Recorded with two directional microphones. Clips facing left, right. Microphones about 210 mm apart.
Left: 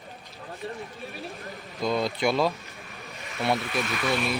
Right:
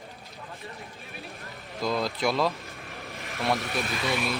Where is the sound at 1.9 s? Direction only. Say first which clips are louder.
Left 2 dB; centre (ahead or behind).